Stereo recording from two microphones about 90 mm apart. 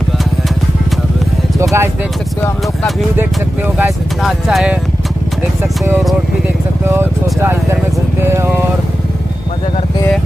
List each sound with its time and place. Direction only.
1.6 s a sound: 35° right (ahead or behind)
3.2 s speech: 20° right (ahead or behind)
4.2 s speech: centre (ahead or behind)
6.9 s speech: 25° right (ahead or behind)